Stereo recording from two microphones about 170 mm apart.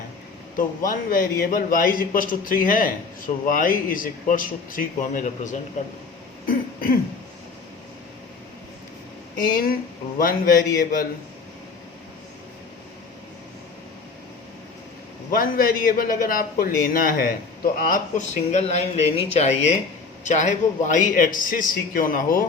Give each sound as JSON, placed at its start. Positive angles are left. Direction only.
{"t": 0.5, "sound": "a man's voice", "side_deg": 55}
{"t": 9.4, "sound": "a man's voice", "side_deg": 55}
{"t": 15.3, "sound": "a man's voice", "side_deg": 55}